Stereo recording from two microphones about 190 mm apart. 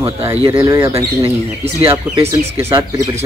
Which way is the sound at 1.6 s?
30° right (ahead or behind).